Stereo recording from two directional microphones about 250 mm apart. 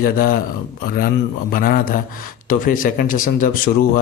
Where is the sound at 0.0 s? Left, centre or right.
Left.